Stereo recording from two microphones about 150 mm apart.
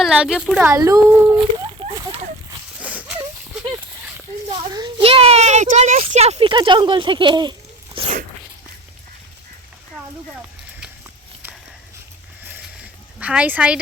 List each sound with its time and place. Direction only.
0.0 s speech: centre (ahead or behind)
0.7 s a child's voice: 25° right (ahead or behind)
1.8 s a sound: 35° right (ahead or behind)
2.8 s dog: 10° right (ahead or behind)
4.7 s a child's voice: 30° right (ahead or behind)
8.0 s a sound: 35° right (ahead or behind)
13.1 s speech: 10° right (ahead or behind)